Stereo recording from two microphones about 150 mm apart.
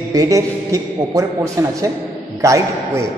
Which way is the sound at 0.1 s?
20° right (ahead or behind).